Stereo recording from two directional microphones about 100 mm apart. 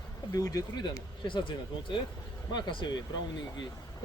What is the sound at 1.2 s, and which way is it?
Speech, 55° left (ahead or behind).